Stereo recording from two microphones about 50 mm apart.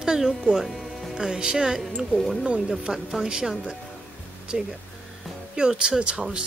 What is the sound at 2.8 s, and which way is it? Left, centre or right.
Speech, centre.